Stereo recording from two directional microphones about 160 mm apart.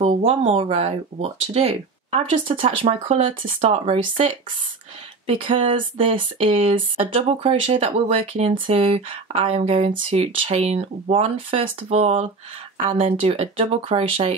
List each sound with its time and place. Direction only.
0.0 s speech: 40° right (ahead or behind)
5.2 s speech: 35° right (ahead or behind)